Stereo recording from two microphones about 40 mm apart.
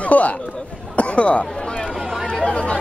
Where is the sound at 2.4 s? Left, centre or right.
Left.